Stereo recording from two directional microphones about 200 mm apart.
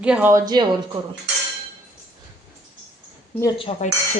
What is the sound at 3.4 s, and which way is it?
Speech, 30° left (ahead or behind).